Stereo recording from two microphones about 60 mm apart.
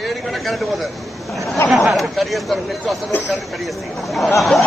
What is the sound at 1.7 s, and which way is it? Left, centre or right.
Chatter, centre.